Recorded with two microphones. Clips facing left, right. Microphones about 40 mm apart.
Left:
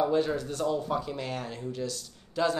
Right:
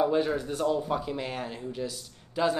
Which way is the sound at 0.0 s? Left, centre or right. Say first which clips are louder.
Right 1 dB; centre.